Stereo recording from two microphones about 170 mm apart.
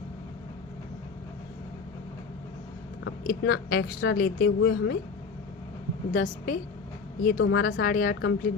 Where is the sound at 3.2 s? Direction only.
60° left (ahead or behind); by 4.9 s 80° left.